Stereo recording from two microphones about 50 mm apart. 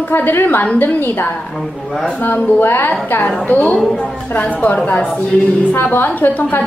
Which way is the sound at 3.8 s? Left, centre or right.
Centre.